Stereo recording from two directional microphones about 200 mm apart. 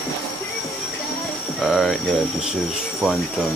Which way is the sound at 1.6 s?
Centre (ahead or behind).